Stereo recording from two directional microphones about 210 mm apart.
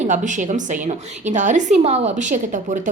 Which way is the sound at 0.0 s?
35° right (ahead or behind).